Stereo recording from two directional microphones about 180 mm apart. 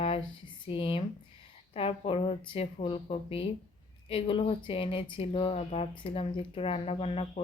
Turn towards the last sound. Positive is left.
turn(degrees=35)  # may be behind; listen again after turning